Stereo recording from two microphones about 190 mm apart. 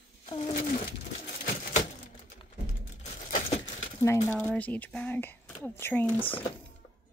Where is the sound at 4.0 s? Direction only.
15° left (ahead or behind).